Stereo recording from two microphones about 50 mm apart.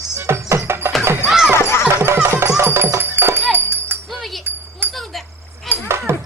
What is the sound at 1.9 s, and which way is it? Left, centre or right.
Music, right.